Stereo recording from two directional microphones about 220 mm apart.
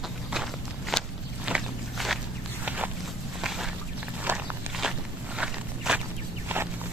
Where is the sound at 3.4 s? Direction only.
Centre (ahead or behind).